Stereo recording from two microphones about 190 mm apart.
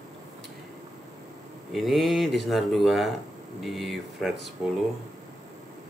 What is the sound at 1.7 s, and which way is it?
Speech, centre (ahead or behind).